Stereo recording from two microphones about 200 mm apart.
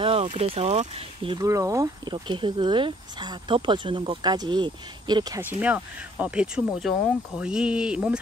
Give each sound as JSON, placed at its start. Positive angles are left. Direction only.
{"t": 0.0, "sound": "speech", "side_deg": -25}
{"t": 1.4, "sound": "speech", "side_deg": -15}
{"t": 5.4, "sound": "speech", "side_deg": -10}